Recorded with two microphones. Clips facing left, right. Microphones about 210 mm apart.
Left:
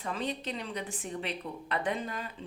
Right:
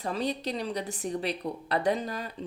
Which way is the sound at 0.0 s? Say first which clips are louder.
Right 4 dB; 35° right (ahead or behind).